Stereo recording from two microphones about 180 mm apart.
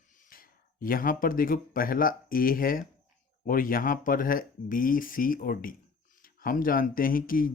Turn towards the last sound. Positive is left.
turn(degrees=50)  # may be behind; listen again after turning